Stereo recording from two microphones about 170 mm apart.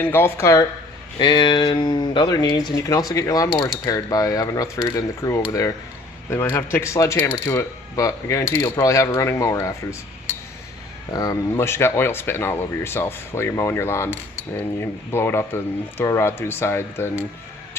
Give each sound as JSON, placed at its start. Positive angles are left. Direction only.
{"t": 0.0, "sound": "speech", "side_deg": 15}
{"t": 1.2, "sound": "mechanisms", "side_deg": 25}
{"t": 6.3, "sound": "speech", "side_deg": 15}
{"t": 11.1, "sound": "speech", "side_deg": 20}